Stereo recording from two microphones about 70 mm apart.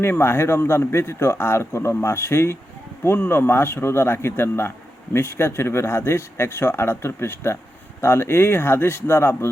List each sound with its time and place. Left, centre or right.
0.0 s a man's voice: left